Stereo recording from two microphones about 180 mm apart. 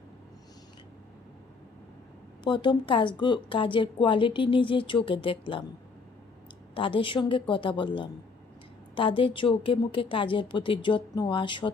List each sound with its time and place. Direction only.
2.4 s speech: 25° left (ahead or behind)
6.7 s speech: 30° left (ahead or behind)